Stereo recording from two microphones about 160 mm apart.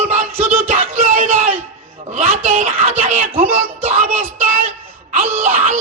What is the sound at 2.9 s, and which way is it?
Speech, 15° right (ahead or behind).